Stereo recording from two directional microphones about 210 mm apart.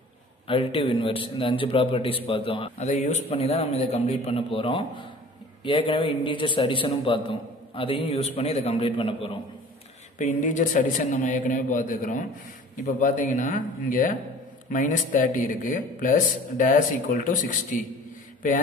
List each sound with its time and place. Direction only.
0.5 s a man's voice: 25° left (ahead or behind)
10.1 s speech: 35° left (ahead or behind)